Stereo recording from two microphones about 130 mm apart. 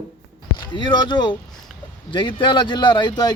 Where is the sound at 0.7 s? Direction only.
35° left (ahead or behind).